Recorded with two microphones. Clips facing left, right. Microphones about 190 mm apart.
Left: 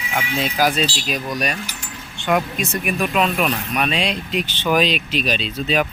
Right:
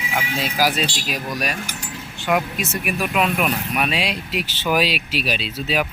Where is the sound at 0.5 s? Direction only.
5° right (ahead or behind).